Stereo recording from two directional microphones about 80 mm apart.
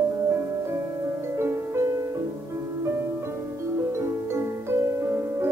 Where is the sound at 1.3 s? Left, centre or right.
Right.